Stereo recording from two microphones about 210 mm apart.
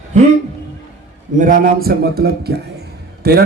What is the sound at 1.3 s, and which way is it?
A man's voice, 40° right (ahead or behind).